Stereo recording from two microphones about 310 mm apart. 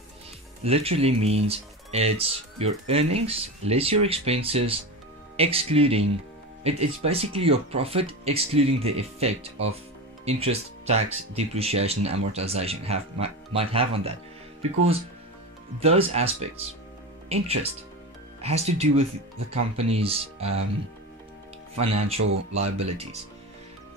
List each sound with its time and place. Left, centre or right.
0.7 s speech: centre
15.8 s speech: centre
21.7 s speech: centre